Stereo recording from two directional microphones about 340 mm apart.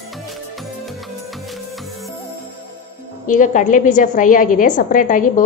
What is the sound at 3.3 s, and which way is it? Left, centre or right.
A woman's voice, left.